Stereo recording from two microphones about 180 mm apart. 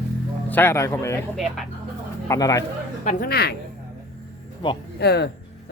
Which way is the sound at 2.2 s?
20° left (ahead or behind).